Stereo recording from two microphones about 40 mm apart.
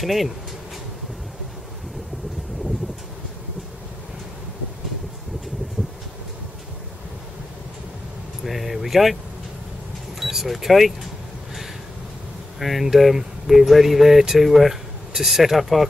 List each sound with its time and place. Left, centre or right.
0.0 s speech: centre
5.8 s a sound: centre
8.5 s speech: centre
10.2 s speech: centre
12.5 s speech: centre